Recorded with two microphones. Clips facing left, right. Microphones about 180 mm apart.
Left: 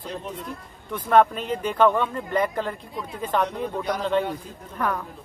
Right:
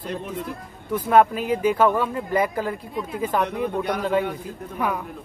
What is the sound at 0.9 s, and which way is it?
Speech, 10° right (ahead or behind).